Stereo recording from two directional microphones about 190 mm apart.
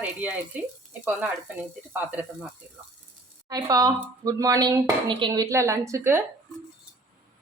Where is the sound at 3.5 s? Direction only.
20° right (ahead or behind).